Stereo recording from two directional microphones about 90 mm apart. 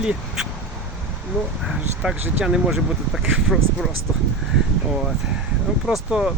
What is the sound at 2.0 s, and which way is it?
Speech, 10° right (ahead or behind).